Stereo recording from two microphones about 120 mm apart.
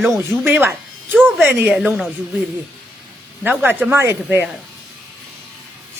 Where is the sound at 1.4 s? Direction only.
10° right (ahead or behind).